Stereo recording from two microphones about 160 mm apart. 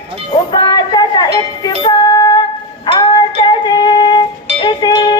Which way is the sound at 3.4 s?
30° left (ahead or behind).